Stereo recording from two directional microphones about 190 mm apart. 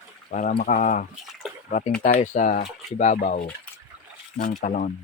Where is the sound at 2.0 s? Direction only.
40° left (ahead or behind).